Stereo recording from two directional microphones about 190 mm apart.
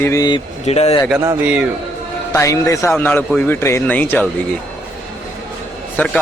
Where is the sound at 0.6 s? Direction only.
35° left (ahead or behind).